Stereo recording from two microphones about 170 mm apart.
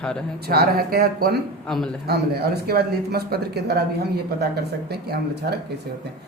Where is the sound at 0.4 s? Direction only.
65° right (ahead or behind).